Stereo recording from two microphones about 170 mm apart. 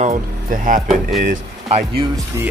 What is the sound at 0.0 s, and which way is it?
Speech, 50° right (ahead or behind).